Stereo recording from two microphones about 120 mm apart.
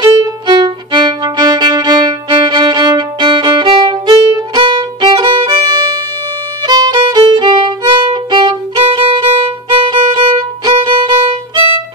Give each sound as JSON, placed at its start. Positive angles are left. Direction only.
{"t": 0.0, "sound": "violin", "side_deg": -35}